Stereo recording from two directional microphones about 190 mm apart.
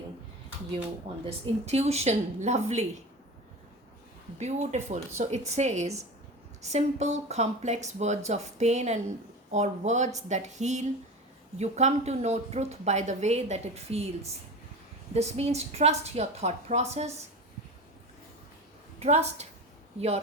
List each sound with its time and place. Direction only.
1.2 s a woman's voice: 35° right (ahead or behind)
4.4 s a woman's voice: 35° right (ahead or behind)
18.9 s a woman's voice: 35° right (ahead or behind)